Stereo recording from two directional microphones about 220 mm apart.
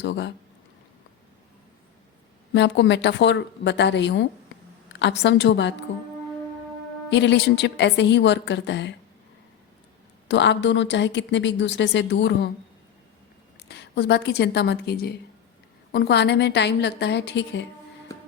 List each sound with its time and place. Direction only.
0.0 s a woman's voice: 50° left (ahead or behind)
2.5 s a woman's voice: 55° left (ahead or behind)
7.1 s a woman's voice: 55° left (ahead or behind)
10.2 s a woman's voice: 55° left (ahead or behind)
13.7 s a woman's voice: 50° left (ahead or behind)